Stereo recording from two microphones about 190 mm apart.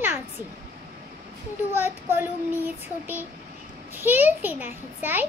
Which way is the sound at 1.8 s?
10° right (ahead or behind).